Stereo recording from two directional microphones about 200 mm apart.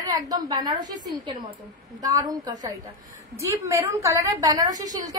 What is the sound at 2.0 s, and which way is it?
A woman's voice, 20° right (ahead or behind).